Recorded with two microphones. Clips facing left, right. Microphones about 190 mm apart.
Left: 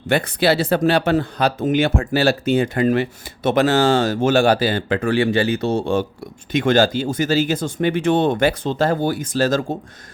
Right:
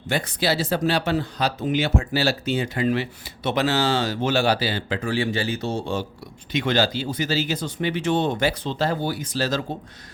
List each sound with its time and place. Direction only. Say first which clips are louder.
0.1 s speech: left 6 dB; 60° left (ahead or behind)